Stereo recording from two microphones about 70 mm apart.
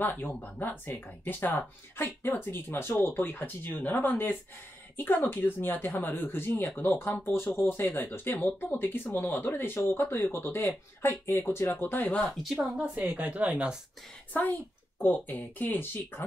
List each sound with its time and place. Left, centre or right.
0.0 s speech: left
12.4 s speech: centre
12.8 s speech: centre
14.3 s speech: left